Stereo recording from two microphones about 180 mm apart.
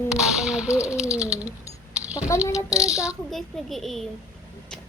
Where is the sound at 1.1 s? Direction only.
5° right (ahead or behind).